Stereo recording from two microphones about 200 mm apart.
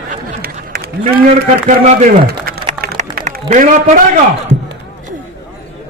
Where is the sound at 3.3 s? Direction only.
45° right (ahead or behind).